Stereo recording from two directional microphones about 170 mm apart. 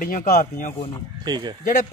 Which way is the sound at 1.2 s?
25° right (ahead or behind).